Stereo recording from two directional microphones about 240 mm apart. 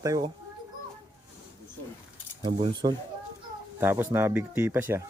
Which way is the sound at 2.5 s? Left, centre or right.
Right.